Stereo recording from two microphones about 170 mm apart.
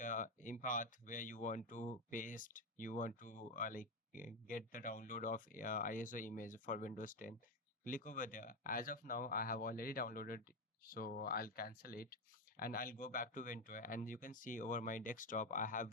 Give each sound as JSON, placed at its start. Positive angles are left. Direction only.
{"t": 0.0, "sound": "speech", "side_deg": 50}